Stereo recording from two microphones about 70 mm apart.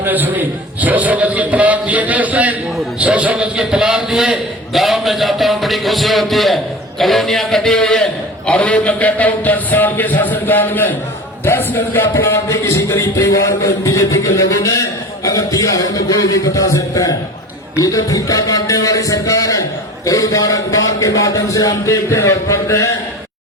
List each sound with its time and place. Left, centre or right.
0.0 s a man's voice: right; by 22.9 s left